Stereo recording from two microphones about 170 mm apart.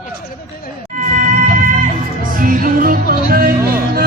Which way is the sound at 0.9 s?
50° right (ahead or behind).